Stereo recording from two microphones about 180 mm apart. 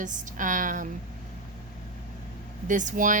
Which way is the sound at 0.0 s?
45° right (ahead or behind).